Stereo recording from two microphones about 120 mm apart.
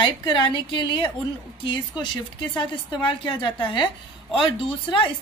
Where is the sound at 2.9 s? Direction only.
40° left (ahead or behind).